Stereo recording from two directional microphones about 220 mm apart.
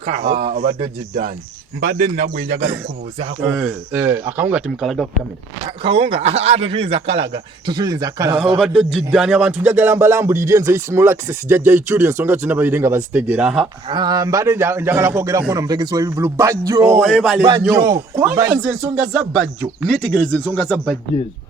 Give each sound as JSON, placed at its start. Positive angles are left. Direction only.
{"t": 0.0, "sound": "speech", "side_deg": -30}
{"t": 3.4, "sound": "speech", "side_deg": -5}
{"t": 5.6, "sound": "speech", "side_deg": -25}
{"t": 8.5, "sound": "music", "side_deg": -5}
{"t": 13.8, "sound": "music", "side_deg": -20}
{"t": 17.0, "sound": "speech", "side_deg": 0}
{"t": 17.7, "sound": "speech", "side_deg": -15}